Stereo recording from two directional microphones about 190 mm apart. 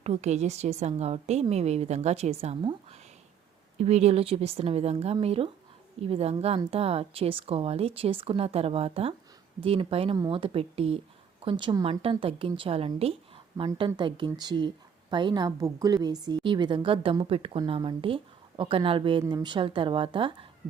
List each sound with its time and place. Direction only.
0.0 s a woman's voice: 35° right (ahead or behind)